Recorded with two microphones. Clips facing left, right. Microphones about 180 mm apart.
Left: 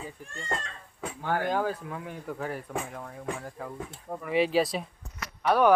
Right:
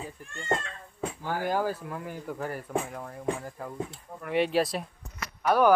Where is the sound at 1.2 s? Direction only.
60° left (ahead or behind).